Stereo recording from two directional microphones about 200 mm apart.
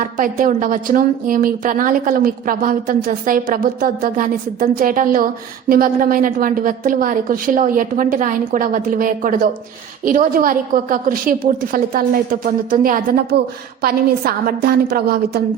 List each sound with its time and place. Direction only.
0.0 s a woman's voice: 40° right (ahead or behind)